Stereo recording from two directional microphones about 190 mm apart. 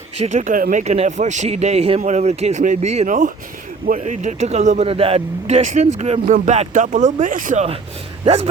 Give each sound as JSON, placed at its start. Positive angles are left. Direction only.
{"t": 0.2, "sound": "speech", "side_deg": -40}